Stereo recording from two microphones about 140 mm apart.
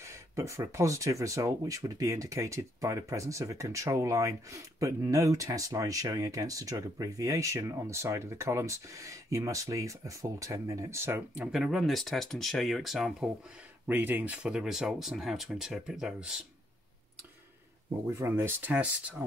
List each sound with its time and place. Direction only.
0.0 s speech: 20° right (ahead or behind); by 13.3 s 5° right (ahead or behind)
13.8 s speech: 15° right (ahead or behind)
18.1 s speech: 20° right (ahead or behind)